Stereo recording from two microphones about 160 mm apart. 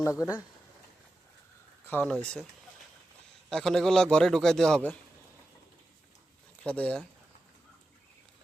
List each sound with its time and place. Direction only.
0.0 s speech: 15° left (ahead or behind)
1.9 s speech: 10° left (ahead or behind)
3.5 s a man's voice: 5° left (ahead or behind)
6.6 s speech: 10° left (ahead or behind)